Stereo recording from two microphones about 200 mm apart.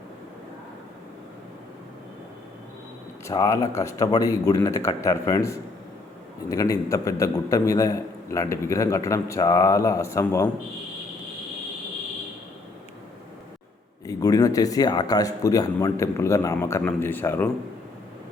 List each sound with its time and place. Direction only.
3.2 s a man's voice: 15° left (ahead or behind)
14.1 s a man's voice: 20° left (ahead or behind)